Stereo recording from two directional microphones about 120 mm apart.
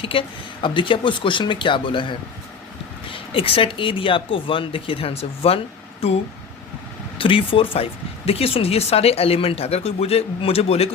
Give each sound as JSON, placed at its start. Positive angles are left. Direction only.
{"t": 0.0, "sound": "speech", "side_deg": 50}
{"t": 7.2, "sound": "speech", "side_deg": 45}